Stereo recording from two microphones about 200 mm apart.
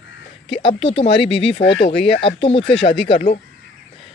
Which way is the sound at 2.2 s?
25° left (ahead or behind).